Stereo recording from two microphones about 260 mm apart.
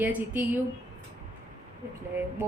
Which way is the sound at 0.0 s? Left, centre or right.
Centre.